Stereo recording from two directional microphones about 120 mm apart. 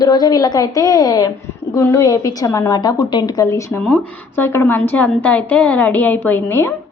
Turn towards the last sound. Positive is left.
turn(degrees=20)  # may be behind; listen again after turning